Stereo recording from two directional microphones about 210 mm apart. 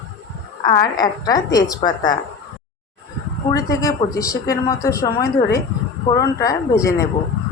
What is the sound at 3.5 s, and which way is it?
Speech, 15° left (ahead or behind).